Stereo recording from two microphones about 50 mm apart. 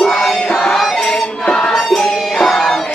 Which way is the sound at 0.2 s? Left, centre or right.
Centre.